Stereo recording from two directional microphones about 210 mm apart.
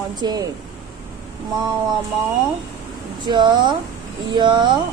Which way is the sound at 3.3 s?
20° right (ahead or behind).